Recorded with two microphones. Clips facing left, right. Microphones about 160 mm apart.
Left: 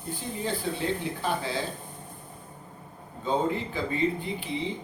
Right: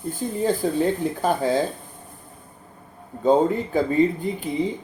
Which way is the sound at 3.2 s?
45° right (ahead or behind).